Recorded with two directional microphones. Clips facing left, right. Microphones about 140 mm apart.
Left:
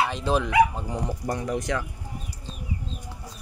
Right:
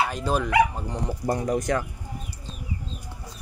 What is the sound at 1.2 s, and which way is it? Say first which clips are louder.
Speech: right 6 dB; 35° right (ahead or behind).